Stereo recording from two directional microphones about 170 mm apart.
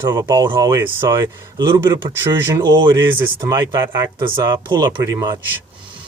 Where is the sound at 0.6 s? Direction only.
15° right (ahead or behind).